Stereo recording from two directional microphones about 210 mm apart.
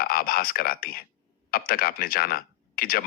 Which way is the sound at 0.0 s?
45° left (ahead or behind).